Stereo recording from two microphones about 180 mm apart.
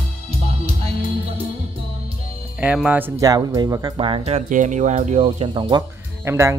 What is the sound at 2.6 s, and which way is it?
Speech, 5° right (ahead or behind).